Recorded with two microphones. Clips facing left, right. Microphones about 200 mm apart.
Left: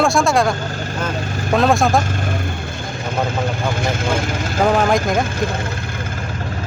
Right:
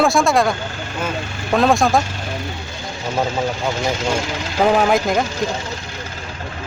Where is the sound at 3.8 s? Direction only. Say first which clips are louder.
Even; 55° left (ahead or behind).